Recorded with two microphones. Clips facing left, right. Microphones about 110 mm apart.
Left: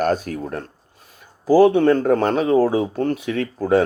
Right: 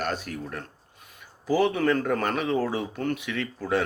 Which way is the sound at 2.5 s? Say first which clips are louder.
Left 10 dB; 40° left (ahead or behind).